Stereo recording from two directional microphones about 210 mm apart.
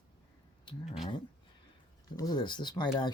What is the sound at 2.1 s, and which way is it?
Speech, 20° left (ahead or behind).